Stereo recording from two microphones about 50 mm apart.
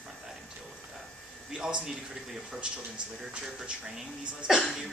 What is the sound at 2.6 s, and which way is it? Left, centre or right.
Speech, right.